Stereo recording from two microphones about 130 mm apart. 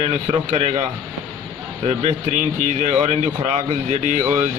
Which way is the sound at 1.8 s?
65° right (ahead or behind).